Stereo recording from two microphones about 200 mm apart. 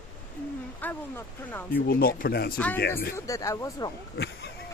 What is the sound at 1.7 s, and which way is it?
Speech, 50° left (ahead or behind).